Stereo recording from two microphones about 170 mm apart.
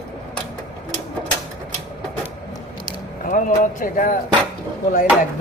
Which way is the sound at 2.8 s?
50° left (ahead or behind).